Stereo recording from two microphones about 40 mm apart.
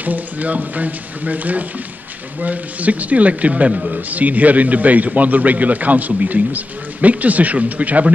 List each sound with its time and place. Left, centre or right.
0.0 s a man's voice: right
4.1 s a man's voice: right